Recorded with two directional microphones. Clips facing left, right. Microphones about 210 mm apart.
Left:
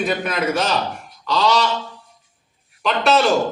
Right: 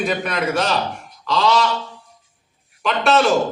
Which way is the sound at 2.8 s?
Centre (ahead or behind).